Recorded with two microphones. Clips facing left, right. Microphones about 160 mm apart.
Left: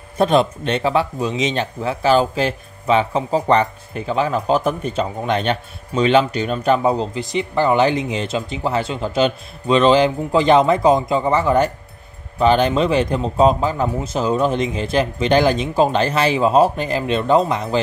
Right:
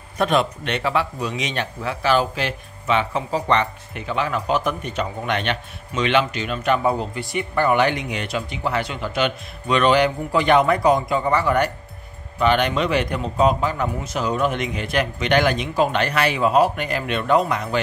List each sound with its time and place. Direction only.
0.2 s speech: 30° left (ahead or behind)
6.8 s speech: 20° left (ahead or behind)